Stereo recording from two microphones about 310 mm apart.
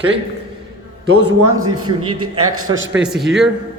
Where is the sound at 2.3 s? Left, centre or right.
Right.